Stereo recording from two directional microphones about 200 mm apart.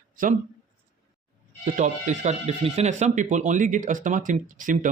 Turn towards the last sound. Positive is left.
turn(degrees=-40)  # may be behind; listen again after turning